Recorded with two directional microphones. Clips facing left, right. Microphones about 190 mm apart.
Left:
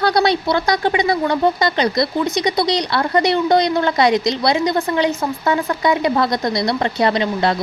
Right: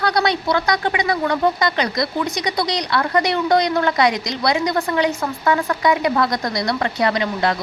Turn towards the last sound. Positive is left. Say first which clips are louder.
# left 2 dB
turn(degrees=30)  # may be behind; listen again after turning